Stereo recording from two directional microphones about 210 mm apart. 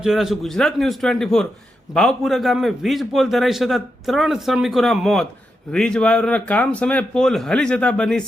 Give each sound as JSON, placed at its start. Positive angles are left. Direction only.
{"t": 0.0, "sound": "a man's voice", "side_deg": 0}